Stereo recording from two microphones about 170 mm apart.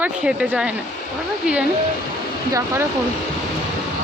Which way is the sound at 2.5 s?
20° right (ahead or behind).